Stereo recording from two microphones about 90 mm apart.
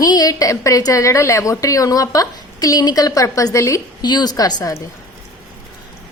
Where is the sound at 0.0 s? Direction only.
45° left (ahead or behind).